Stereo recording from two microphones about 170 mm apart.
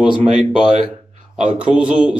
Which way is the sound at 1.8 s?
5° right (ahead or behind).